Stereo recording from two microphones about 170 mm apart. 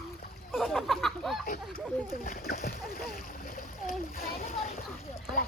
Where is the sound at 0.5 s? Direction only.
Centre (ahead or behind).